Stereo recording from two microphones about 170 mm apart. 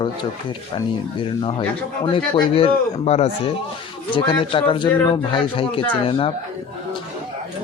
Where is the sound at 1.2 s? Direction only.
30° left (ahead or behind).